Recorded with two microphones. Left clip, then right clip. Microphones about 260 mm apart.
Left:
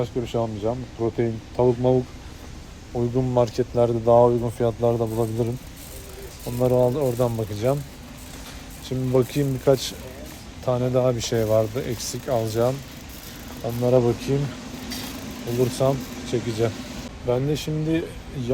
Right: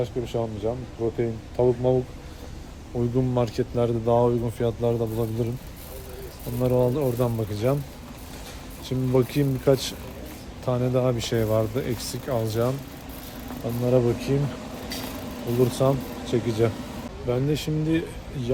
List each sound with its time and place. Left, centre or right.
0.0 s speech: left
1.6 s speech: left
3.0 s speech: centre
6.6 s speech: centre
8.9 s speech: centre
13.8 s speech: centre
15.7 s speech: centre
17.2 s speech: centre